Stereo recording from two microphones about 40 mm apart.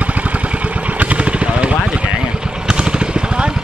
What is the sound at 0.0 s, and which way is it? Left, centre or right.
Vehicle, right.